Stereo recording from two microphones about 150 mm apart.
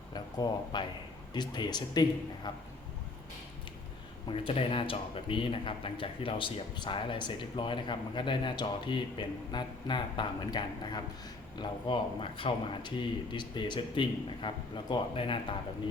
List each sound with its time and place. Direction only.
0.1 s a sound: 30° left (ahead or behind)
1.3 s a man's voice: 30° left (ahead or behind)
4.3 s a man's voice: 35° left (ahead or behind)